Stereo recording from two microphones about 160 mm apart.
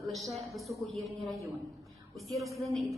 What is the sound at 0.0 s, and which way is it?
A woman's voice, centre (ahead or behind).